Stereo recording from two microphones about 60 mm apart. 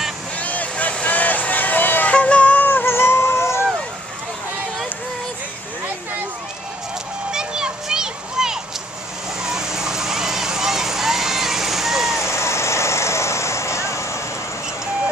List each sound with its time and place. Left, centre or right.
0.4 s vehicle: left
2.1 s music: centre
2.7 s howl: left
7.2 s music: centre
9.4 s vehicle: centre
12.3 s vehicle: left